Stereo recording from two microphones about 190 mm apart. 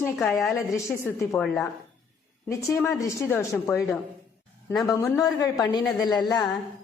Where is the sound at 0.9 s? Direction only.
15° left (ahead or behind).